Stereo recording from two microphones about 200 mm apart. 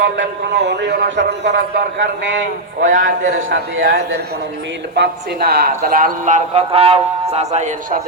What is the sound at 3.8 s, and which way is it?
Speech, 50° right (ahead or behind).